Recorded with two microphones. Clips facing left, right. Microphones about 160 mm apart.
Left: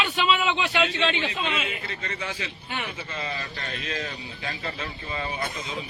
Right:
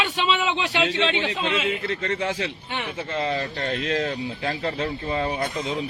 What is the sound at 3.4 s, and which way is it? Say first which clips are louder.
Speech: right 8 dB; 45° right (ahead or behind).